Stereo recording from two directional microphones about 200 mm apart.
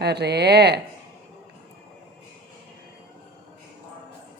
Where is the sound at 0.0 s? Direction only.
55° right (ahead or behind).